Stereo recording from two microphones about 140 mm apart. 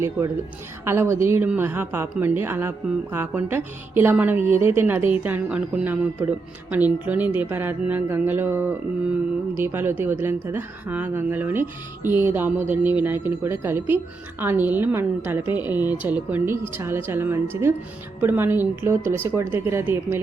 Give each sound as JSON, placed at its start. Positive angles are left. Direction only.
{"t": 0.9, "sound": "a woman's voice", "side_deg": -20}